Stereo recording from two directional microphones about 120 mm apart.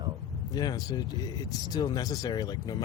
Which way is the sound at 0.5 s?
35° left (ahead or behind).